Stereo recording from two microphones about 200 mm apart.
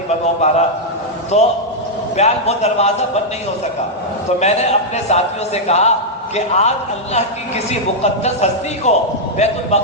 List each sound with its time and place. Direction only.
0.4 s a man's voice: 35° left (ahead or behind)
4.4 s a man's voice: 35° left (ahead or behind)